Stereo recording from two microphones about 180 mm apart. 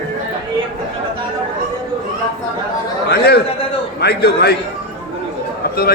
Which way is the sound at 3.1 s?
60° left (ahead or behind).